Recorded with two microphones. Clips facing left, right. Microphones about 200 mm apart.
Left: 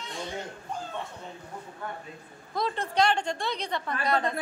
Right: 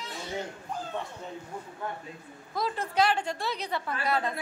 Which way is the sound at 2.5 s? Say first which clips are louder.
Left 1 dB; 5° right (ahead or behind).